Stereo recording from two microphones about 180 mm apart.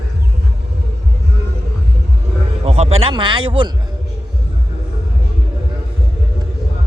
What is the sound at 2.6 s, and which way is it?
Speech, 35° right (ahead or behind).